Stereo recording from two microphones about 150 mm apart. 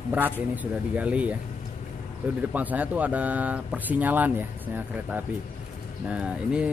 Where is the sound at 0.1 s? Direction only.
10° right (ahead or behind).